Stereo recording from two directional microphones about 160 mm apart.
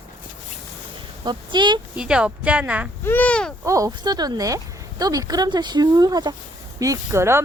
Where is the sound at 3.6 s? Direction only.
20° right (ahead or behind).